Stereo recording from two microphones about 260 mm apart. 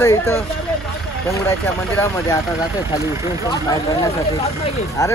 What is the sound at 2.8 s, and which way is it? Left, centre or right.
Speech, centre.